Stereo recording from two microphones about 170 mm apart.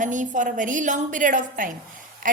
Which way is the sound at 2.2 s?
55° right (ahead or behind).